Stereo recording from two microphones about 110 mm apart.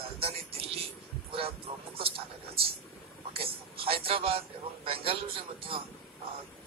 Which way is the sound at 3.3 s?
60° right (ahead or behind).